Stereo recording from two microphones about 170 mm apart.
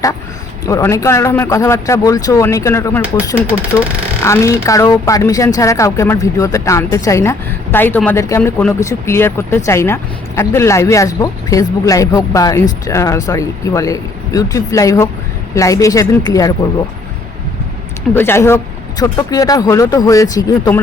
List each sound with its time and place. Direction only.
0.6 s speech: 20° left (ahead or behind)
18.1 s speech: 15° left (ahead or behind)